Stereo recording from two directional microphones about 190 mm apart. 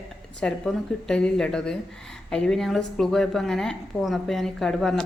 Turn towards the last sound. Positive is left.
turn(degrees=0)  # may be behind; listen again after turning